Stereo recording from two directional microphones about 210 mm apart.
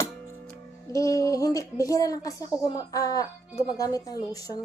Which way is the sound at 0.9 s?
15° left (ahead or behind).